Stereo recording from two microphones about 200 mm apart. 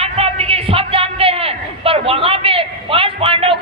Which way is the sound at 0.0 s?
30° right (ahead or behind).